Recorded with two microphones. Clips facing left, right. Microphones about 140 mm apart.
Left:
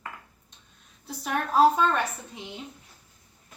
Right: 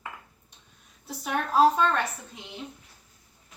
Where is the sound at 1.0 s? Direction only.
Centre (ahead or behind).